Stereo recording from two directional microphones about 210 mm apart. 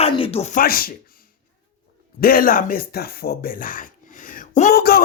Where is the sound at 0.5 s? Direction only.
45° left (ahead or behind).